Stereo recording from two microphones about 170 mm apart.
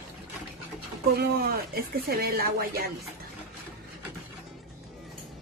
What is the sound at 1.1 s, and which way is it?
Speech, 65° right (ahead or behind).